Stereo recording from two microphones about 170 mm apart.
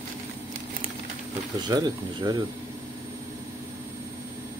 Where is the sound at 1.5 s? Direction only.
25° right (ahead or behind).